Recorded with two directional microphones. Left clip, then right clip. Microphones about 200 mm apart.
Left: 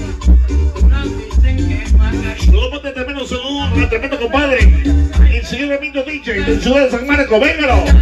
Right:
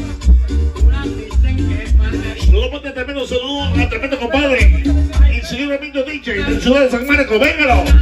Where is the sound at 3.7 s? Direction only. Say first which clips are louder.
Left 3 dB; 35° right (ahead or behind).